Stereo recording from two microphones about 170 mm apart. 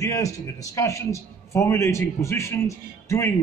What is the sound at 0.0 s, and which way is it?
A man's voice, 20° left (ahead or behind).